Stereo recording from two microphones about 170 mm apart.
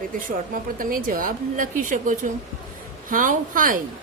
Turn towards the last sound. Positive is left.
turn(degrees=-55)  # may be behind; listen again after turning